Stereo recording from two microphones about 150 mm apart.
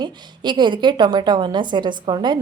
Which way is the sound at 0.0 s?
30° right (ahead or behind).